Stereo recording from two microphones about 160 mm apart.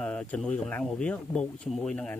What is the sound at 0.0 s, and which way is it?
Speech, 10° left (ahead or behind).